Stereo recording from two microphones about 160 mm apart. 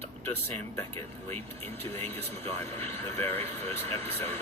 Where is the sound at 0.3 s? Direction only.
15° left (ahead or behind).